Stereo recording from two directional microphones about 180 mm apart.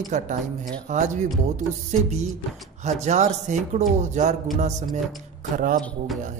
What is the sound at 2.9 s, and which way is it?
A man's voice, 40° right (ahead or behind).